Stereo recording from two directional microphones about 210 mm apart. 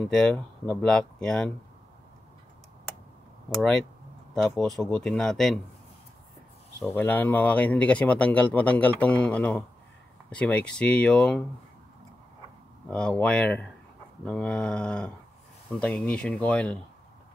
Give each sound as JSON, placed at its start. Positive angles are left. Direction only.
{"t": 0.1, "sound": "speech", "side_deg": 5}
{"t": 3.5, "sound": "speech", "side_deg": 0}
{"t": 6.8, "sound": "speech", "side_deg": 10}
{"t": 12.9, "sound": "speech", "side_deg": 5}